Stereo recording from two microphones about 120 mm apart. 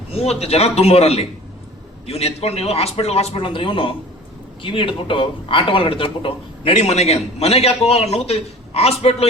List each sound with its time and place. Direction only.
0.1 s a man's voice: 60° left (ahead or behind)